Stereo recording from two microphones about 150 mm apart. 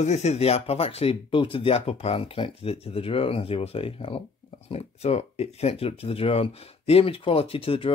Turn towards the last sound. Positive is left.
turn(degrees=35)  # may be behind; listen again after turning